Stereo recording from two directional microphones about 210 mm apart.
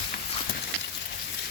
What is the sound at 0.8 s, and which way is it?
Rain on surface, 50° left (ahead or behind).